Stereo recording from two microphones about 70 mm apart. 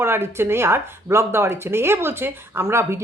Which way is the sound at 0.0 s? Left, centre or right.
Right.